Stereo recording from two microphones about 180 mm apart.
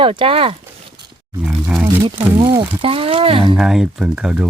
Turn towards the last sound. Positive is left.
turn(degrees=-5)  # may be behind; listen again after turning